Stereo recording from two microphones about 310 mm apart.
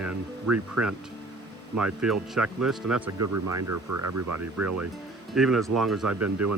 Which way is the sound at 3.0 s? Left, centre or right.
Right.